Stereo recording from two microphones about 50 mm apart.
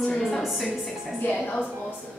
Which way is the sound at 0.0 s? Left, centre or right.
Centre.